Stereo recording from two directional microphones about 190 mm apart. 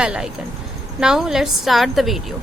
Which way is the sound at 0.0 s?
5° right (ahead or behind).